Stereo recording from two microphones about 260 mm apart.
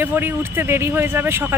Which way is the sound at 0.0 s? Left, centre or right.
Centre.